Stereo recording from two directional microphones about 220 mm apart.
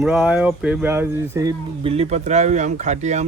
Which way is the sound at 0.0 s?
5° right (ahead or behind).